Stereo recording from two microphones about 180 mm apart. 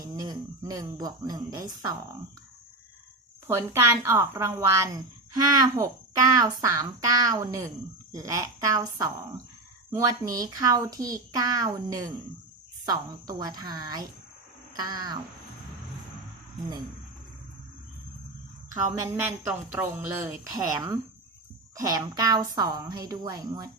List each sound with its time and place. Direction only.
0.0 s speech: 20° right (ahead or behind)
3.4 s a child's voice: 15° right (ahead or behind)
18.7 s a child's voice: 15° right (ahead or behind)